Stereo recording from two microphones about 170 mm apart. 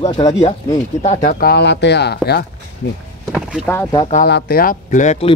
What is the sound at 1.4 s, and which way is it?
Speech, 70° left (ahead or behind).